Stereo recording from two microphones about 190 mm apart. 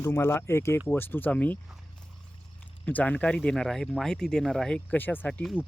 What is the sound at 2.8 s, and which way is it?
Speech, 10° left (ahead or behind).